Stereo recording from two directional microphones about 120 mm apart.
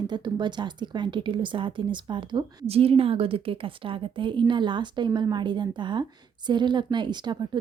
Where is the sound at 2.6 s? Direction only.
55° right (ahead or behind).